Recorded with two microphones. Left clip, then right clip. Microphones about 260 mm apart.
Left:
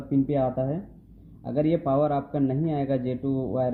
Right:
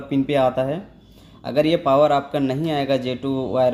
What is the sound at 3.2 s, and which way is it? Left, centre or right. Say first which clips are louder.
Speech: right 5 dB; right.